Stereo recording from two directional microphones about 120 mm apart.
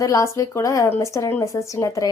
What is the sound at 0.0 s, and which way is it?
A woman's voice, 30° left (ahead or behind).